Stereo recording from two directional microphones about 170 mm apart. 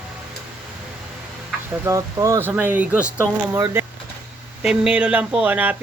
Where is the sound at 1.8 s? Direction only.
20° right (ahead or behind).